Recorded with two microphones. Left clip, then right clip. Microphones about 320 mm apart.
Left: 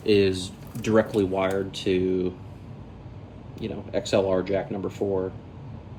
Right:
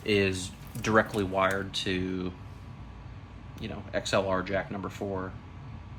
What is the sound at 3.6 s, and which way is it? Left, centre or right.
Speech, centre.